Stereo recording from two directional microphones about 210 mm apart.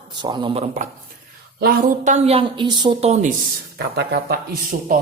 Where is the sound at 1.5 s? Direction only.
45° right (ahead or behind).